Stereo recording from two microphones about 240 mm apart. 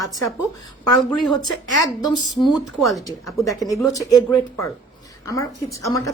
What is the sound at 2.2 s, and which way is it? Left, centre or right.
Speech, centre.